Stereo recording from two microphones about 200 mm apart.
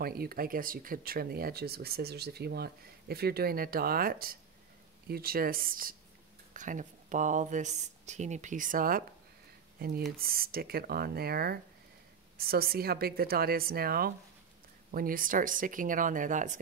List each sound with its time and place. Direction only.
0.0 s speech: 50° right (ahead or behind)